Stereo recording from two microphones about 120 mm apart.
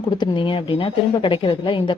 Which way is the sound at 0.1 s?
40° left (ahead or behind).